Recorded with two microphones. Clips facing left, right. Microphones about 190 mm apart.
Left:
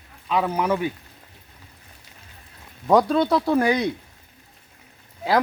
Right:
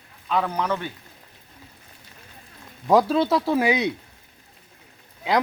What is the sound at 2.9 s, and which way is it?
Speech, 5° right (ahead or behind).